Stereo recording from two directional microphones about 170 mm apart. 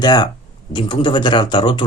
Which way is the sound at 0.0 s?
25° left (ahead or behind).